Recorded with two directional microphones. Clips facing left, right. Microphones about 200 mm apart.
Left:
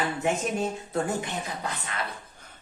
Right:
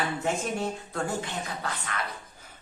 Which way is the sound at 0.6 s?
20° left (ahead or behind).